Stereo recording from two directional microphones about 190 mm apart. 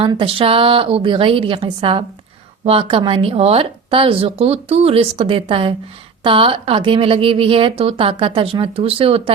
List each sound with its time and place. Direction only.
0.0 s a woman's voice: 25° right (ahead or behind)